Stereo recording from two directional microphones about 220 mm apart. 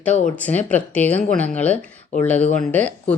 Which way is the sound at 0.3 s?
5° left (ahead or behind).